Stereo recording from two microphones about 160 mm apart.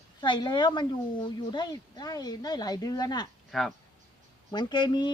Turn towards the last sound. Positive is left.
turn(degrees=30)  # may be behind; listen again after turning